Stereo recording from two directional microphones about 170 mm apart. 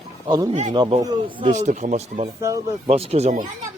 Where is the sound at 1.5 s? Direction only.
45° right (ahead or behind).